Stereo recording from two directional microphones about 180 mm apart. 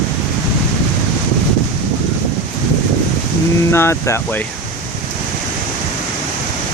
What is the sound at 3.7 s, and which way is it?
Speech, 15° left (ahead or behind).